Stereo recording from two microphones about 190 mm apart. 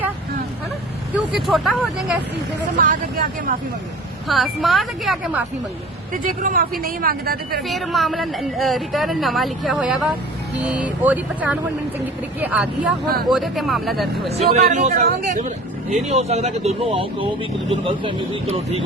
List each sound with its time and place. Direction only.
1.1 s speech: 5° right (ahead or behind)
2.7 s speech: 45° right (ahead or behind)
4.3 s speech: centre (ahead or behind)
6.2 s speech: 45° right (ahead or behind)
7.7 s speech: centre (ahead or behind)
14.3 s speech: 35° right (ahead or behind)